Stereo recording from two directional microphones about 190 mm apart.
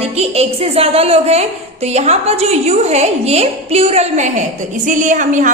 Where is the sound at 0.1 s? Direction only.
35° right (ahead or behind).